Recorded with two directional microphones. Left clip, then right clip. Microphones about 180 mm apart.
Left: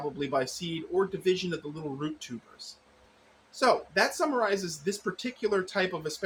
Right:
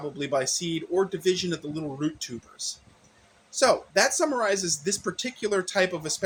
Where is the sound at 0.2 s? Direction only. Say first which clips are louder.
Right 5 dB; 35° right (ahead or behind).